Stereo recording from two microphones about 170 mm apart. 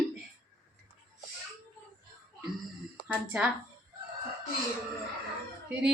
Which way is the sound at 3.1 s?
5° right (ahead or behind).